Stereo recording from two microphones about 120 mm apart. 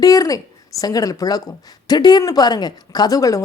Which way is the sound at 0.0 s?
30° left (ahead or behind).